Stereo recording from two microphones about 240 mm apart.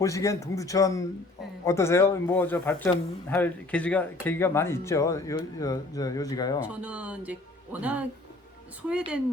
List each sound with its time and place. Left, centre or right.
0.0 s speech: centre
6.8 s speech: centre